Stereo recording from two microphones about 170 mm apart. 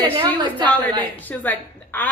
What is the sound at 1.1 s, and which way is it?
Speech, 10° left (ahead or behind).